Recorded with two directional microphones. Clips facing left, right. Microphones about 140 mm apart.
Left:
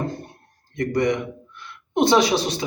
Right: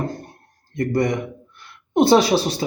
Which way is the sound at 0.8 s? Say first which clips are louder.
Right 1 dB; 35° right (ahead or behind).